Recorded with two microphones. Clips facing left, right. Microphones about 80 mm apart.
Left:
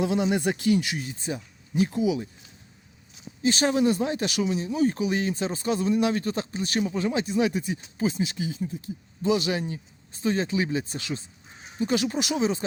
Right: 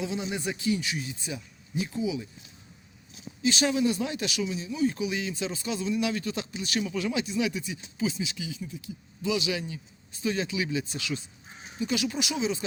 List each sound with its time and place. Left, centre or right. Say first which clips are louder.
0.0 s speech: left 8 dB; left
3.4 s speech: left 3 dB; left